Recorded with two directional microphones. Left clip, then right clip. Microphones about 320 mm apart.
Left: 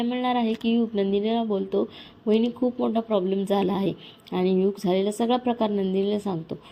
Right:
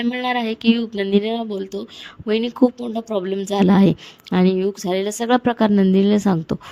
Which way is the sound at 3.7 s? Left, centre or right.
Right.